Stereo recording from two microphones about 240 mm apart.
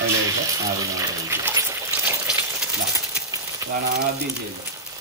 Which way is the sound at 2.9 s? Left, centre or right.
Centre.